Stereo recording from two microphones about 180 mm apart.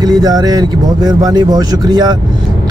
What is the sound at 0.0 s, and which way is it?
Speech, 20° right (ahead or behind).